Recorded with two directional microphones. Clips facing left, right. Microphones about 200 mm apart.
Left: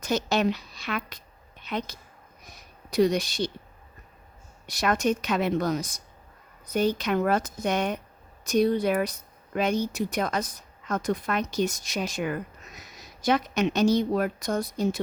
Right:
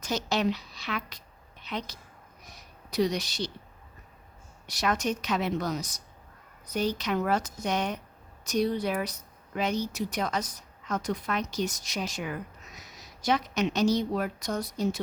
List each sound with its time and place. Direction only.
0.0 s speech: 55° left (ahead or behind)
4.6 s speech: 55° left (ahead or behind)